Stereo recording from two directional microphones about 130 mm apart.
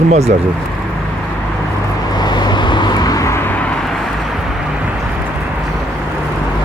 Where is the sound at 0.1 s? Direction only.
55° right (ahead or behind).